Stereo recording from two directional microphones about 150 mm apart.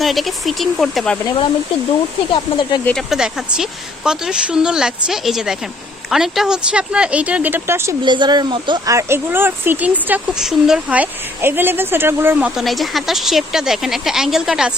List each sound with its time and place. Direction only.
0.0 s speech: centre (ahead or behind)
2.3 s speech: 35° left (ahead or behind)
2.8 s speech: centre (ahead or behind); by 7.9 s 15° right (ahead or behind)
8.0 s speech: 30° right (ahead or behind)
9.0 s speech: 15° right (ahead or behind)